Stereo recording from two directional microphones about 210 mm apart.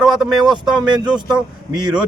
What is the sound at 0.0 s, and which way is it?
Speech, centre (ahead or behind).